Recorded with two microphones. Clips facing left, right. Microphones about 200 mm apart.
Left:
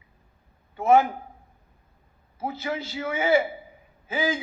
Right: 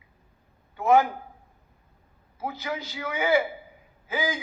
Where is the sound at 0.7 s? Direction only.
25° left (ahead or behind).